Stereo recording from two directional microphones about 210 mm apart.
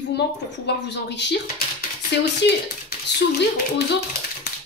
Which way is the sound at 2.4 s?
55° left (ahead or behind).